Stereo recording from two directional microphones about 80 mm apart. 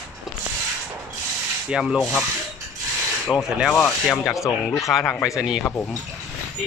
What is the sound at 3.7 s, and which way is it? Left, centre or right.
Rub, left.